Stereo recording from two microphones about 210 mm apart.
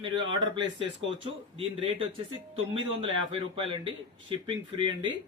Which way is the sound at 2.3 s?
25° right (ahead or behind).